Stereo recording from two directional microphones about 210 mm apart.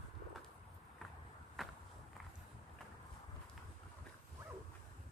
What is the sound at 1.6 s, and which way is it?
Walk, centre (ahead or behind).